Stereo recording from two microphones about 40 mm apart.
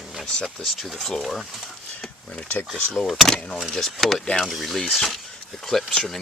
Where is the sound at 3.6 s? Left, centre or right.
Centre.